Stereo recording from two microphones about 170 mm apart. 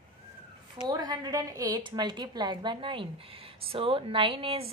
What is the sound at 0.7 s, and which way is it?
A woman's voice, 25° right (ahead or behind).